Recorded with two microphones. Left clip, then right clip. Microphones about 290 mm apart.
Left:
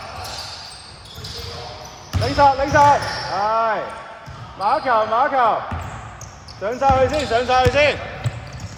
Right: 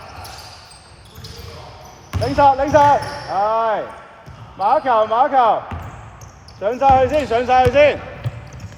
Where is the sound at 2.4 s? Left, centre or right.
Right.